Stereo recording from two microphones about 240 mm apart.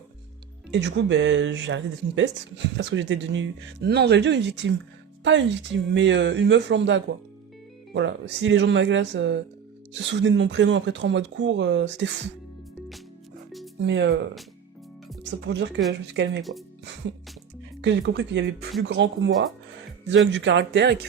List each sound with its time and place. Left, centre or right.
0.7 s speech: right
13.8 s speech: right
15.4 s speech: right
16.4 s speech: centre
17.7 s speech: right
20.1 s speech: right